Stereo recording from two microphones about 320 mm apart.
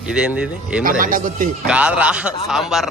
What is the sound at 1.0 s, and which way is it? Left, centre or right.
Speech, right.